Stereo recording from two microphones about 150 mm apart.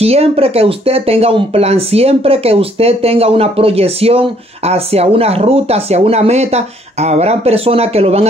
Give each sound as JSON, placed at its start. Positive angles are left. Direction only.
{"t": 0.0, "sound": "speech", "side_deg": -40}